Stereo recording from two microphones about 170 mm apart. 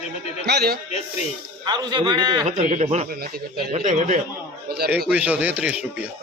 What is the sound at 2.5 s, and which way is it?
Speech, 45° right (ahead or behind).